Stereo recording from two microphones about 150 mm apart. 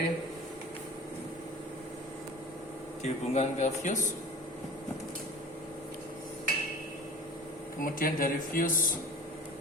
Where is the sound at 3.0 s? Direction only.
50° left (ahead or behind).